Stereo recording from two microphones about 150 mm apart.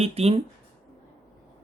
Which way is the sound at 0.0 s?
40° right (ahead or behind).